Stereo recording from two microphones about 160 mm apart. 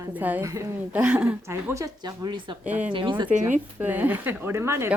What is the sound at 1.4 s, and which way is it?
A woman's voice, 20° right (ahead or behind).